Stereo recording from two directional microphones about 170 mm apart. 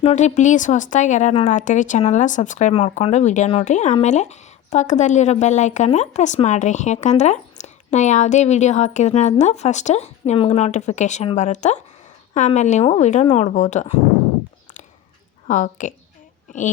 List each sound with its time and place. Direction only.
0.0 s speech: 40° left (ahead or behind)
15.4 s speech: 50° left (ahead or behind)